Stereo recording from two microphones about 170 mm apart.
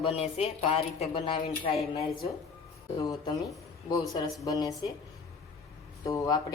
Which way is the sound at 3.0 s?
25° left (ahead or behind).